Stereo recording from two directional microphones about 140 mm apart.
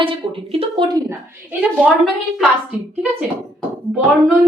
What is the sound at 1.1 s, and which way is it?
Speech, 10° right (ahead or behind).